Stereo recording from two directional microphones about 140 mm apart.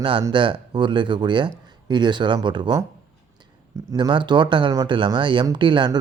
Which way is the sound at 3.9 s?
35° right (ahead or behind).